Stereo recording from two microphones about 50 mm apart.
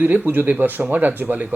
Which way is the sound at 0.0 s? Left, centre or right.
Right.